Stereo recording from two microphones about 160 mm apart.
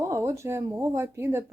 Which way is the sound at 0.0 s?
15° right (ahead or behind).